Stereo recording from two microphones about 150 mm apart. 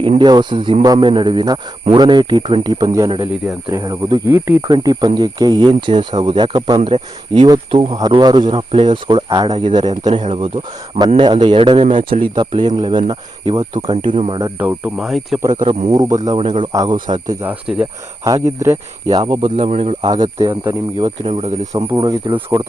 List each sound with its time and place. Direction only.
0.0 s speech: 30° right (ahead or behind)
4.3 s speech: 15° right (ahead or behind)
10.1 s speech: 45° right (ahead or behind)
14.6 s speech: 10° right (ahead or behind)
15.6 s speech: 40° right (ahead or behind)
15.9 s speech: 25° right (ahead or behind)
17.4 s speech: 10° right (ahead or behind)
18.2 s speech: 20° right (ahead or behind)
19.1 s speech: 30° right (ahead or behind)
19.5 s speech: 45° right (ahead or behind)
20.0 s speech: 30° right (ahead or behind)
21.0 s speech: 40° right (ahead or behind)
22.0 s speech: 30° right (ahead or behind)